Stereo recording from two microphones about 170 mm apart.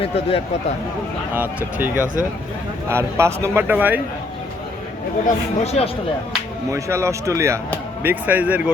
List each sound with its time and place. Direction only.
0.0 s speech: 35° left (ahead or behind)
1.3 s a man's voice: 10° right (ahead or behind)
5.2 s speech: 40° left (ahead or behind)
6.7 s a man's voice: 20° right (ahead or behind)